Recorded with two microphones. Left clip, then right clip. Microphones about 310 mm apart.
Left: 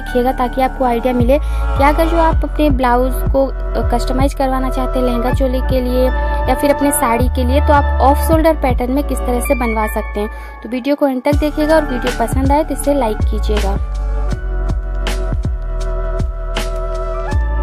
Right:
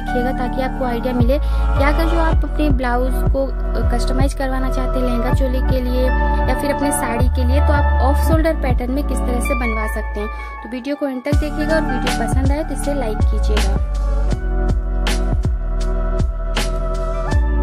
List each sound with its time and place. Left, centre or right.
0.1 s speech: centre
14.3 s music: centre